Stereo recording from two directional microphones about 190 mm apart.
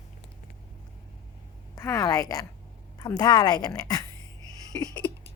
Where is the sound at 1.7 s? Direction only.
15° left (ahead or behind).